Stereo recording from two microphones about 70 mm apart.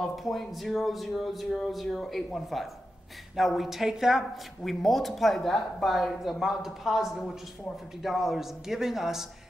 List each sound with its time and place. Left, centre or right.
0.0 s speech: centre